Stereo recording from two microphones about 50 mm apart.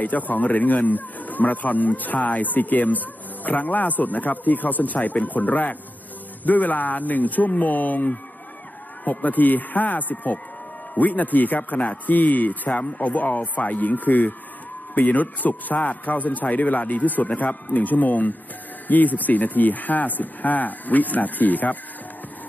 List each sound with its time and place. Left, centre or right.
0.0 s speech: left